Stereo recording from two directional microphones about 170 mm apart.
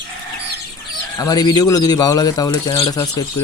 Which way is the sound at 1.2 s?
20° left (ahead or behind).